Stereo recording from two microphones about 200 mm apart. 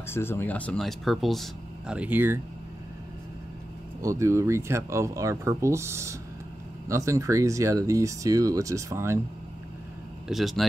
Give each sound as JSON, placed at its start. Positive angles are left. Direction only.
{"t": 0.0, "sound": "speech", "side_deg": 10}
{"t": 4.0, "sound": "speech", "side_deg": -15}
{"t": 10.2, "sound": "speech", "side_deg": 0}